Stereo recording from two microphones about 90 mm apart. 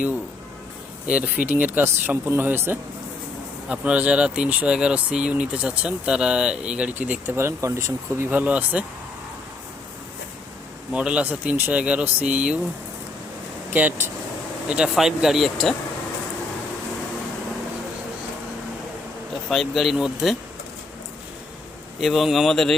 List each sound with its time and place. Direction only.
1.0 s speech: 15° right (ahead or behind)
7.3 s speech: 30° right (ahead or behind)
10.9 s speech: 15° right (ahead or behind)
13.7 s speech: 20° right (ahead or behind)
14.7 s speech: 5° right (ahead or behind)
19.3 s speech: centre (ahead or behind)
22.0 s speech: centre (ahead or behind)